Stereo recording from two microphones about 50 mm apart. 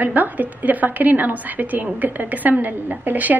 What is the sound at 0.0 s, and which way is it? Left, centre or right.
A woman's voice, right.